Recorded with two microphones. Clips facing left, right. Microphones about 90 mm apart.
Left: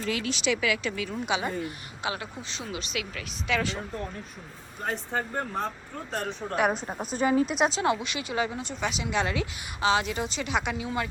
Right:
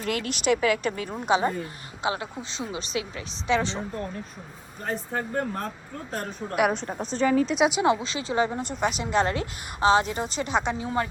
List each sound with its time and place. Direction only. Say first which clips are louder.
0.0 s a woman's voice: right 2 dB; 55° right (ahead or behind); by 3.8 s 25° right (ahead or behind)
4.9 s speech: right 1 dB; centre (ahead or behind)
6.7 s a woman's voice: right 1 dB; 5° left (ahead or behind)
7.9 s a woman's voice: right 3 dB; 30° right (ahead or behind)